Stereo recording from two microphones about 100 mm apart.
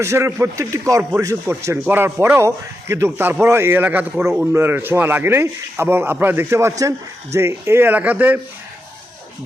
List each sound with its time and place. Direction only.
0.0 s speech: 25° right (ahead or behind)